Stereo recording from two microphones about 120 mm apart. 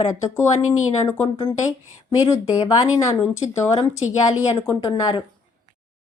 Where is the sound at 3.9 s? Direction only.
65° left (ahead or behind).